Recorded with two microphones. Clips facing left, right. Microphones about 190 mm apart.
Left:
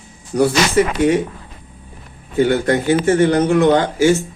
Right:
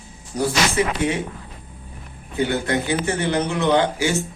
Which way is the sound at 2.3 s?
45° left (ahead or behind).